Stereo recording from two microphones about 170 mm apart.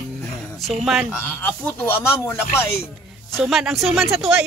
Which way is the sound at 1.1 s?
10° left (ahead or behind).